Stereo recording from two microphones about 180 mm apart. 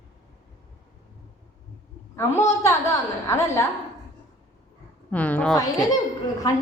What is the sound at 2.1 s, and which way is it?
A woman's voice, 15° left (ahead or behind).